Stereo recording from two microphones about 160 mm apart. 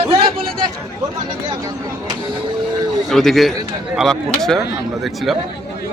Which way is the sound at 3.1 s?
Centre (ahead or behind).